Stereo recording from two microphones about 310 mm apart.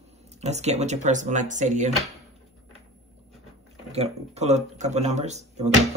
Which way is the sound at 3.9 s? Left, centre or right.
Right.